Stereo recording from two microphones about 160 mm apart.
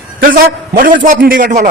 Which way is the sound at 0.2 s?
60° right (ahead or behind).